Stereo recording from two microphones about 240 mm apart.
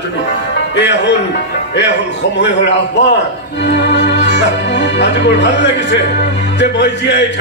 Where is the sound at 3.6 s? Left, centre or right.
Left.